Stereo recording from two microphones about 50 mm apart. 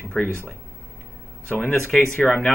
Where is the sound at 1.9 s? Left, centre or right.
Centre.